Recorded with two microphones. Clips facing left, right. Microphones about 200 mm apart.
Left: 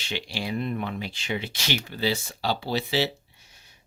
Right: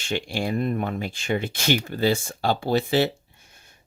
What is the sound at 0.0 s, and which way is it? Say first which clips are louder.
Speech: right 6 dB; 50° right (ahead or behind).